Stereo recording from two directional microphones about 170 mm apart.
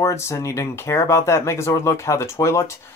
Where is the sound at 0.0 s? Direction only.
15° left (ahead or behind).